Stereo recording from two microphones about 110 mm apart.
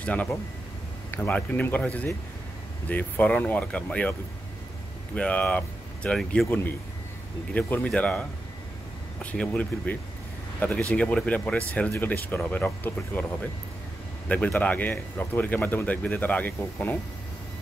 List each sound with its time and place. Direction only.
0.0 s speech: 10° left (ahead or behind)
5.1 s speech: 10° left (ahead or behind)
7.5 s speech: 10° left (ahead or behind)
14.3 s speech: 10° left (ahead or behind)